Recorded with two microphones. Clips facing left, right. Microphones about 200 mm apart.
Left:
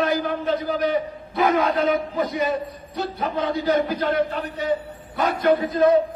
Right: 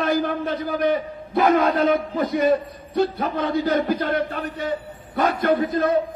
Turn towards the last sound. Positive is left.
turn(degrees=-50)  # may be behind; listen again after turning